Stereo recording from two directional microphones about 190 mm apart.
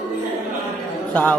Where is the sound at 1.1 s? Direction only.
10° left (ahead or behind).